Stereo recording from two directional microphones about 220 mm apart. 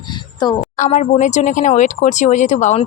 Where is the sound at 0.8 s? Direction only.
35° left (ahead or behind).